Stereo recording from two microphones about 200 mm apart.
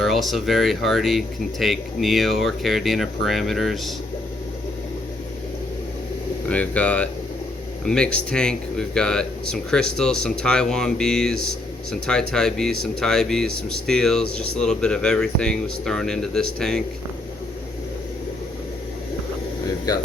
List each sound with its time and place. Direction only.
0.0 s speech: centre (ahead or behind)
6.5 s speech: 5° left (ahead or behind)
19.6 s air conditioning: 20° left (ahead or behind)